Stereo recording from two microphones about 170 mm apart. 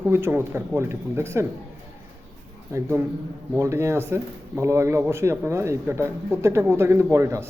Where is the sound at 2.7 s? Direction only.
15° right (ahead or behind).